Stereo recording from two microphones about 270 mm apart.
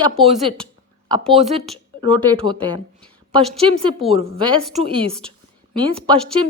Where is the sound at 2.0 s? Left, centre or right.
Centre.